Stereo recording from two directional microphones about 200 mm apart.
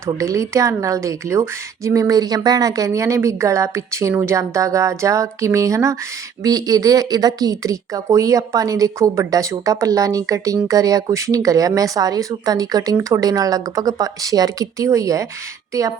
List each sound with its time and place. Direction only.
0.0 s speech: 15° right (ahead or behind)